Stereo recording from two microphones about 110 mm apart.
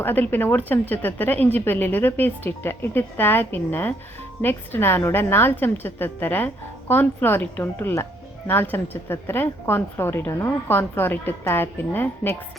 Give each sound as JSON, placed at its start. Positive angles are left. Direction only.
{"t": 0.0, "sound": "a woman's voice", "side_deg": 20}